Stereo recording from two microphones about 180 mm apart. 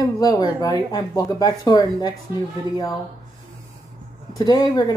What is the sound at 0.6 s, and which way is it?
Speech, 20° left (ahead or behind).